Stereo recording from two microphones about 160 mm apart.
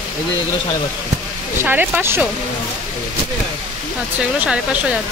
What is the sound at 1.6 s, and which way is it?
Speech, 10° right (ahead or behind).